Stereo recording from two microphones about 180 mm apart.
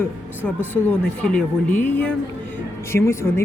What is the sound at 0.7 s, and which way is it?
Speech, 10° left (ahead or behind).